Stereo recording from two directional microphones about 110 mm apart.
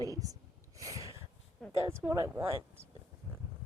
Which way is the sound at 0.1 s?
35° right (ahead or behind).